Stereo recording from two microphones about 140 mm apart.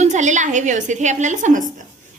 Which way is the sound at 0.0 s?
60° right (ahead or behind).